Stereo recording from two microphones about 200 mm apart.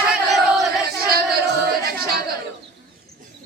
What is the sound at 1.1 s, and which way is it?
Singing, 50° right (ahead or behind).